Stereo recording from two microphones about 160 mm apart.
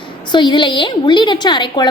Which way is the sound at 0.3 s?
30° left (ahead or behind).